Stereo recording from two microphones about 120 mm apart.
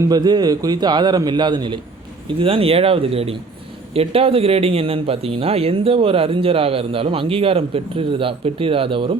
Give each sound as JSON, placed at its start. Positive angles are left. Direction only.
{"t": 0.1, "sound": "a man's voice", "side_deg": -35}
{"t": 2.4, "sound": "speech", "side_deg": -50}